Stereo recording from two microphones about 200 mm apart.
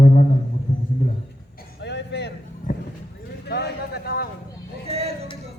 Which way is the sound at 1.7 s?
60° left (ahead or behind).